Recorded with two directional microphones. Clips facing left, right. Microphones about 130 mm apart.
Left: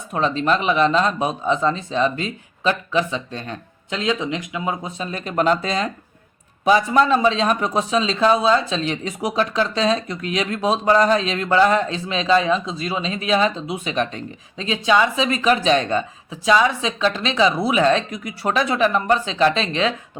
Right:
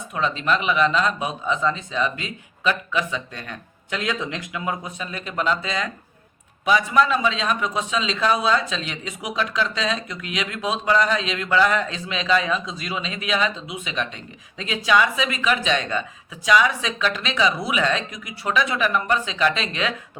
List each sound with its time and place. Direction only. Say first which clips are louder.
0.1 s speech: left 4 dB; 35° left (ahead or behind)
14.6 s speech: left 2 dB; 25° left (ahead or behind)